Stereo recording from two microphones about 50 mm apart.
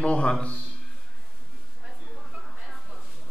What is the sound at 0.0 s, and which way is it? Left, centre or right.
Speech, left.